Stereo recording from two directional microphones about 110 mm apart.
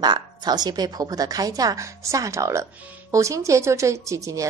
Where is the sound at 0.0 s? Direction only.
40° right (ahead or behind).